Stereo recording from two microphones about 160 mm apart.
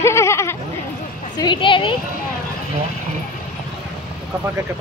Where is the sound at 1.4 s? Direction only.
30° left (ahead or behind).